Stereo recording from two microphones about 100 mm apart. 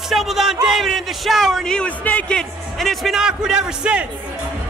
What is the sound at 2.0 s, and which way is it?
Speech, 15° left (ahead or behind).